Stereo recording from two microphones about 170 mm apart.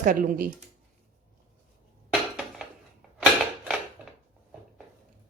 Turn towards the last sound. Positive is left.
turn(degrees=0)  # may be behind; listen again after turning